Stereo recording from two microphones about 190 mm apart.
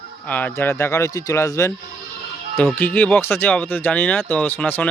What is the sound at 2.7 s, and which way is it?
A man's voice, 10° left (ahead or behind).